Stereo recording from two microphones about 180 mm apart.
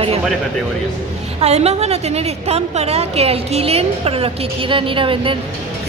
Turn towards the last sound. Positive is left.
turn(degrees=-30)  # may be behind; listen again after turning